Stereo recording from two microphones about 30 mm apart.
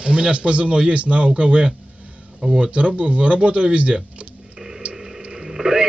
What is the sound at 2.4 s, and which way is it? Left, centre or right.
Speech, right.